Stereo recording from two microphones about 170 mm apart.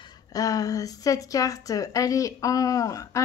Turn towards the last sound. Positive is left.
turn(degrees=20)  # may be behind; listen again after turning